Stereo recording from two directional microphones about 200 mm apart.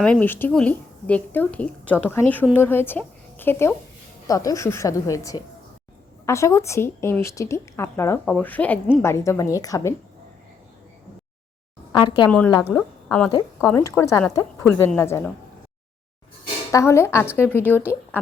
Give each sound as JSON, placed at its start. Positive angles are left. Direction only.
{"t": 0.0, "sound": "a woman's voice", "side_deg": 5}
{"t": 11.9, "sound": "speech", "side_deg": 20}
{"t": 12.7, "sound": "a woman's voice", "side_deg": 5}
{"t": 16.7, "sound": "speech", "side_deg": 15}